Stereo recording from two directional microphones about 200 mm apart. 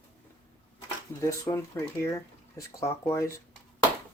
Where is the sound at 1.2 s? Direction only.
15° left (ahead or behind).